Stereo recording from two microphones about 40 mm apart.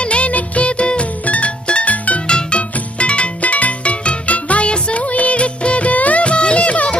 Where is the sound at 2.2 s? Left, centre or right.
Left.